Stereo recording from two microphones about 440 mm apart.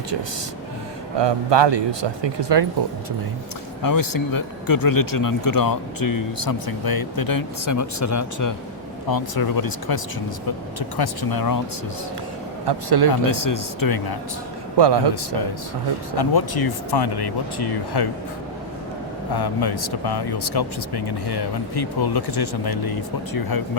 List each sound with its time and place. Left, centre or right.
1.2 s speech: right
3.8 s speech: left
9.0 s speech: left
12.6 s speech: right
13.3 s speech: left
14.8 s speech: right
16.1 s speech: left
19.3 s speech: left